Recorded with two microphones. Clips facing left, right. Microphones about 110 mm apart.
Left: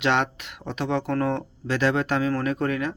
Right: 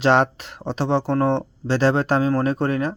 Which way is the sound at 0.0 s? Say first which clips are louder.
Right 6 dB; 35° right (ahead or behind).